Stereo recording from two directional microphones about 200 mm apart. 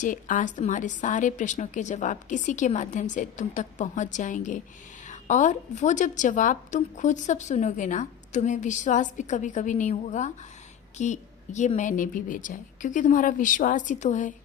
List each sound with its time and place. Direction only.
0.0 s a woman's voice: 40° left (ahead or behind)